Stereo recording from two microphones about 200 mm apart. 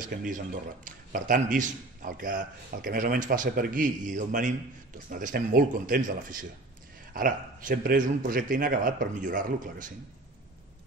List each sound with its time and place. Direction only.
0.0 s speech: 40° right (ahead or behind)